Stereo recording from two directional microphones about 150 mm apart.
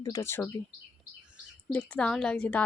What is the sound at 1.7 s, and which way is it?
Speech, 5° left (ahead or behind).